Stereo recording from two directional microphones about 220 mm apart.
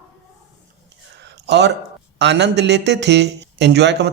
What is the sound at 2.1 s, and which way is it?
Speech, 50° right (ahead or behind).